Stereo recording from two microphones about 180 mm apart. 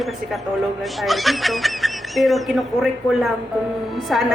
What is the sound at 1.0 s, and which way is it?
A man's voice, centre (ahead or behind).